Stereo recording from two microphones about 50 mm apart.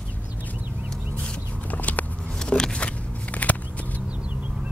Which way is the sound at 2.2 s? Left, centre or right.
Centre.